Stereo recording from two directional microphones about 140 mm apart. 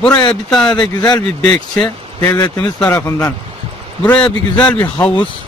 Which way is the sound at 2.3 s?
30° left (ahead or behind).